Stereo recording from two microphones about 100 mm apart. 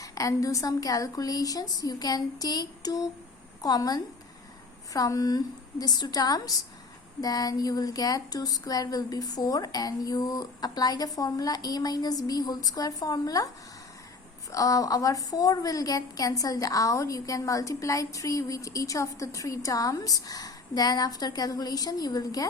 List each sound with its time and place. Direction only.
0.0 s a woman's voice: 35° left (ahead or behind)
14.5 s a woman's voice: 35° left (ahead or behind)